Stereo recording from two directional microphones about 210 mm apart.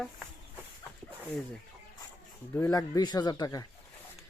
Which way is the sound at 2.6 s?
15° left (ahead or behind).